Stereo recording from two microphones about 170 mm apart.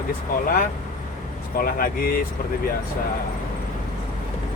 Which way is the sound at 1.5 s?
60° left (ahead or behind).